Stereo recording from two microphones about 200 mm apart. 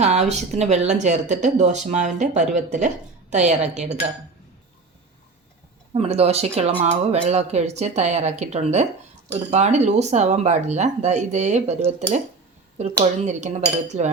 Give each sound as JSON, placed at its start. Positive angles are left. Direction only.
{"t": 0.0, "sound": "speech", "side_deg": -35}
{"t": 5.9, "sound": "speech", "side_deg": -30}